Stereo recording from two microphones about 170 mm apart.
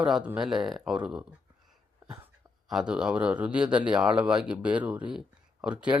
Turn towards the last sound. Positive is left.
turn(degrees=-5)  # may be behind; listen again after turning